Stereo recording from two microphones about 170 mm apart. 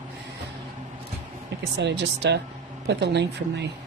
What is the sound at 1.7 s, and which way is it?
Speech, 85° right.